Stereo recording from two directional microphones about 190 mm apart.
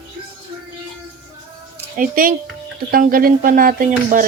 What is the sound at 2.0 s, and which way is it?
Speech, 45° right (ahead or behind).